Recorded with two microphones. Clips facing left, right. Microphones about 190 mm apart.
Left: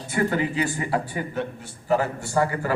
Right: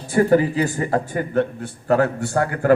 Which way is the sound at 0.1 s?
40° right (ahead or behind).